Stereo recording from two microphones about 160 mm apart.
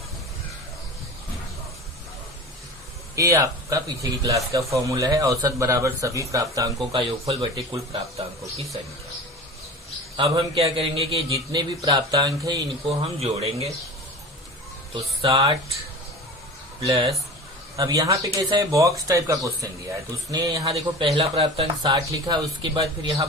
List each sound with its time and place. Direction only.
3.2 s speech: 20° right (ahead or behind)
6.9 s speech: 30° right (ahead or behind)
10.2 s speech: 30° right (ahead or behind)
11.3 s speech: 25° right (ahead or behind)
12.9 s speech: 40° right (ahead or behind)
15.2 s speech: 30° right (ahead or behind)
16.8 s speech: 30° right (ahead or behind)
20.7 s speech: 35° right (ahead or behind)